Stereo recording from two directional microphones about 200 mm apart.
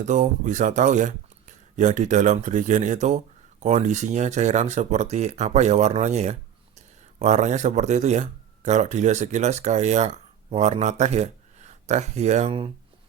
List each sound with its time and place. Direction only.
0.0 s speech: 40° right (ahead or behind)